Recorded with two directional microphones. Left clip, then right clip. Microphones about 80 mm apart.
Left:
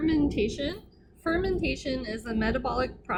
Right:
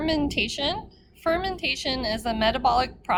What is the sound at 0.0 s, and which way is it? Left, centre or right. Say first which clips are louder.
A woman's voice: right 1 dB; right.